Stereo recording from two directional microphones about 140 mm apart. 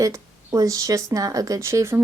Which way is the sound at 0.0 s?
25° right (ahead or behind).